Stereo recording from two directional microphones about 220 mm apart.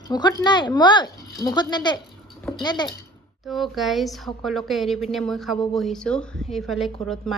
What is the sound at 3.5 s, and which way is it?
A woman's voice, centre (ahead or behind).